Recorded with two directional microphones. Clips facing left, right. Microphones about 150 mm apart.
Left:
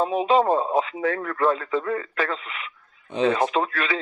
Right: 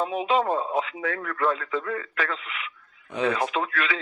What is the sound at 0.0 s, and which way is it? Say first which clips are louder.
Speech: left 4 dB; 35° left (ahead or behind).